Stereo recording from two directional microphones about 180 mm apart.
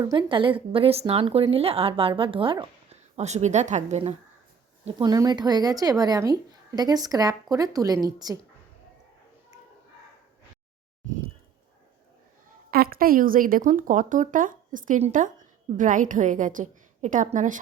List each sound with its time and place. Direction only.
0.0 s speech: 25° right (ahead or behind)
4.9 s speech: 25° right (ahead or behind)
12.7 s a woman's voice: 55° right (ahead or behind)